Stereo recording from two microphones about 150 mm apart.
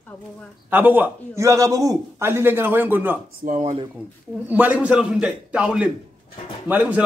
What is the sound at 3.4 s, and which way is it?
Speech, 60° right (ahead or behind).